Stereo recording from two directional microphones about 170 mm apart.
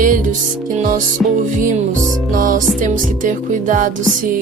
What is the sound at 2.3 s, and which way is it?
Music, 50° right (ahead or behind).